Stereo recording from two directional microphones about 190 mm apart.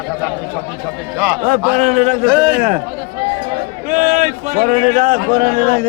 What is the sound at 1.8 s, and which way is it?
Speech, 35° right (ahead or behind).